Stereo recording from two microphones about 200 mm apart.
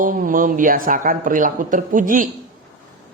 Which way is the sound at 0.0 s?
45° right (ahead or behind).